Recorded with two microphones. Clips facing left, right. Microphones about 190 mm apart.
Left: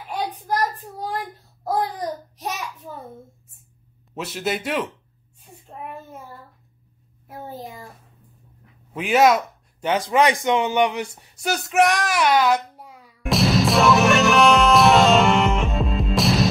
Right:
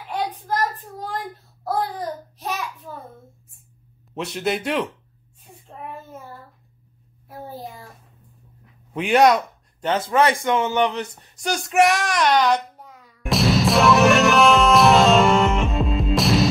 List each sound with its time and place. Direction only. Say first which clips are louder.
0.5 s child singing: even; 10° left (ahead or behind)
1.6 s babbling: left 1 dB; 20° left (ahead or behind)
4.1 s a man's voice: right 2 dB; centre (ahead or behind)
7.2 s a sound: even; 20° left (ahead or behind)
8.9 s speech: right 1 dB; centre (ahead or behind)
13.2 s music: even; centre (ahead or behind)